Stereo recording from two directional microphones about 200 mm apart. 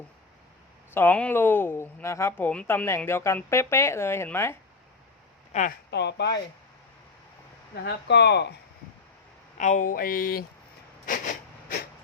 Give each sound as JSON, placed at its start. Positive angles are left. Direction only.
{"t": 0.9, "sound": "speech", "side_deg": 10}
{"t": 5.5, "sound": "speech", "side_deg": 35}
{"t": 5.9, "sound": "speech", "side_deg": 60}
{"t": 7.9, "sound": "speech", "side_deg": 55}
{"t": 9.6, "sound": "speech", "side_deg": 40}